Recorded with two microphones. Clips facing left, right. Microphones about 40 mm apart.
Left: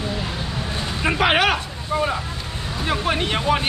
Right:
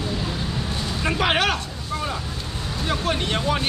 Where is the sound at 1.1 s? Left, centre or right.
Centre.